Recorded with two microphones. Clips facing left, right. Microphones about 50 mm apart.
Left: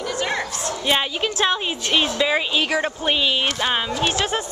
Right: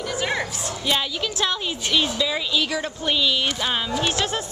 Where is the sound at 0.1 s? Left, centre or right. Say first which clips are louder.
Even; centre.